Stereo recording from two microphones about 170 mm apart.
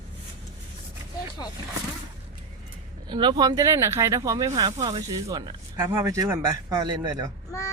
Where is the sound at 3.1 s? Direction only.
25° right (ahead or behind).